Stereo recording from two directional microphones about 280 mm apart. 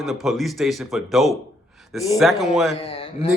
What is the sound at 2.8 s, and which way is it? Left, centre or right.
Speech, left.